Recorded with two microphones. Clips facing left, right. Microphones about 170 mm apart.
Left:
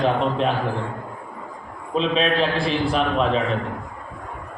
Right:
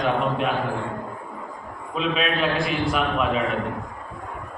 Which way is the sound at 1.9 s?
30° left (ahead or behind).